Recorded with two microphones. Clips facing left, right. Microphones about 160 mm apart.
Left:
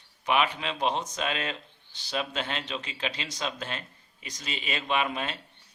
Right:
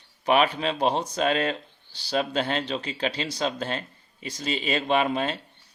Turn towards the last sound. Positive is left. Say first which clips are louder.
# right 6 dB
turn(degrees=-35)  # may be behind; listen again after turning